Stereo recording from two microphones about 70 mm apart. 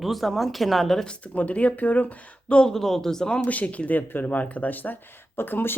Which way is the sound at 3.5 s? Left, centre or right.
Left.